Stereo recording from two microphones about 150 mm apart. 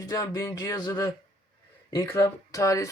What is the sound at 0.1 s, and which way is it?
Speech, 20° left (ahead or behind).